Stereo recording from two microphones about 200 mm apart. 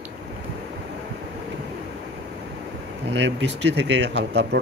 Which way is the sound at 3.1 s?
65° right (ahead or behind).